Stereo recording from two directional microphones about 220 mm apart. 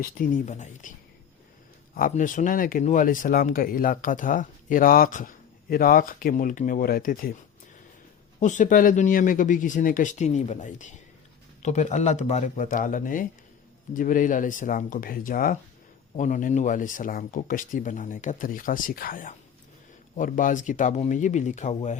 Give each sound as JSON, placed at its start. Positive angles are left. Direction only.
{"t": 0.0, "sound": "speech", "side_deg": 40}
{"t": 2.0, "sound": "speech", "side_deg": 35}
{"t": 8.4, "sound": "speech", "side_deg": 35}